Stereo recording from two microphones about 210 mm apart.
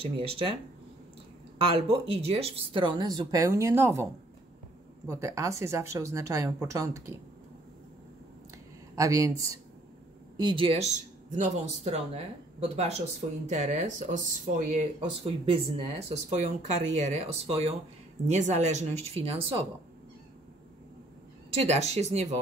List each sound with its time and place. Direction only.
0.0 s speech: 25° right (ahead or behind)
1.6 s speech: 25° right (ahead or behind)
8.9 s speech: 15° right (ahead or behind)
21.5 s speech: 30° right (ahead or behind)